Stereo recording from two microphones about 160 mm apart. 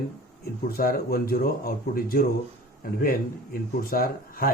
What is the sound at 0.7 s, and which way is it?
Speech, 65° left (ahead or behind).